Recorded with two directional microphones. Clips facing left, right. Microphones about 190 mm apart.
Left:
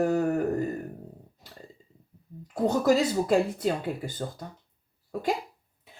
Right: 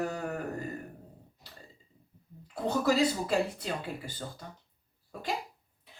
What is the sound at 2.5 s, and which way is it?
Speech, 45° left (ahead or behind).